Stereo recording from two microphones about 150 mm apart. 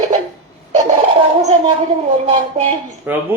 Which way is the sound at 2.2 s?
45° right (ahead or behind).